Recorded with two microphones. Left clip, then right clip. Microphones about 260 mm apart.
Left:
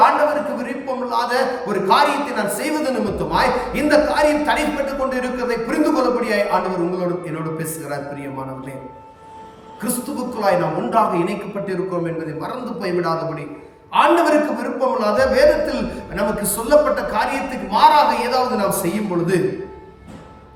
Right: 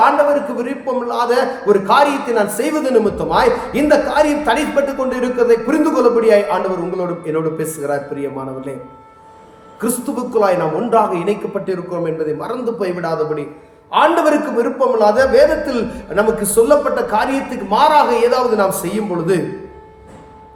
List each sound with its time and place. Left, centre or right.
0.6 s a man's voice: centre
10.3 s a man's voice: centre